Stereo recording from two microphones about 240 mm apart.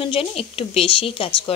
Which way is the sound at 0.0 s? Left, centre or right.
Left.